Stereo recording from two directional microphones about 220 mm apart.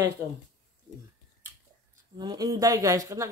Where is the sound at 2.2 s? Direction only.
15° right (ahead or behind).